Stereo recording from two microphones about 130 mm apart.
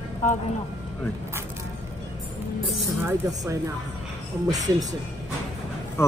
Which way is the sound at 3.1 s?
20° right (ahead or behind).